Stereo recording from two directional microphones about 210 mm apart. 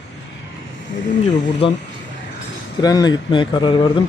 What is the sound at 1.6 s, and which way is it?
Speech, 25° left (ahead or behind).